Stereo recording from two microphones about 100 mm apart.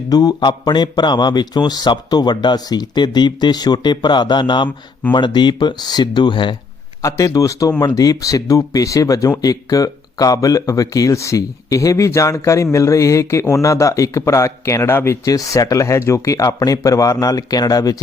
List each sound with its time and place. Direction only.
0.1 s speech: 40° left (ahead or behind)
7.0 s speech: 30° left (ahead or behind)